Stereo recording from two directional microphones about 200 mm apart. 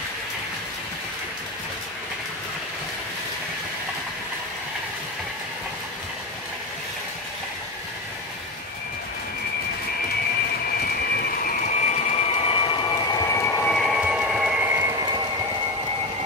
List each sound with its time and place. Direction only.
11.4 s vehicle: 40° left (ahead or behind); by 14.8 s 5° right (ahead or behind)